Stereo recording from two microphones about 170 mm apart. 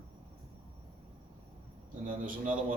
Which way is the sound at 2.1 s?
50° right (ahead or behind).